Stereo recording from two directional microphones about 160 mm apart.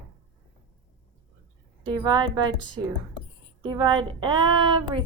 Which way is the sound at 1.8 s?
30° right (ahead or behind).